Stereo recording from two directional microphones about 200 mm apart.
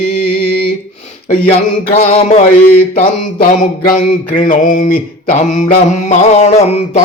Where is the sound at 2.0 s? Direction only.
40° left (ahead or behind).